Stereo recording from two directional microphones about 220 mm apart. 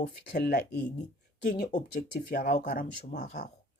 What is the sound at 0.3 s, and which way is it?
Speech, 45° left (ahead or behind).